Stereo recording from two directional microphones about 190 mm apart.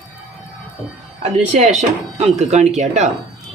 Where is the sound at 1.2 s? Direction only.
40° right (ahead or behind).